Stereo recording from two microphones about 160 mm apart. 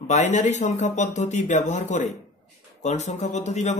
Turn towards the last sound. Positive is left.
turn(degrees=45)  # may be behind; listen again after turning